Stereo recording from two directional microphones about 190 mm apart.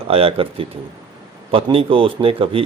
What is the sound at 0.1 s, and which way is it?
A man's voice, 30° right (ahead or behind).